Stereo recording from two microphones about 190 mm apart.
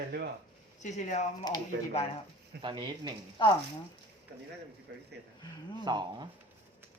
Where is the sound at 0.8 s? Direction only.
40° left (ahead or behind).